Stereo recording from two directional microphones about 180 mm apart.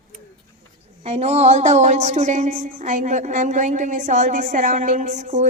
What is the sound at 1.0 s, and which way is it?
Speech, 35° right (ahead or behind).